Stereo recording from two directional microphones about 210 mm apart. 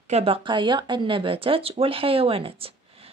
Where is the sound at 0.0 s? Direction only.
30° right (ahead or behind).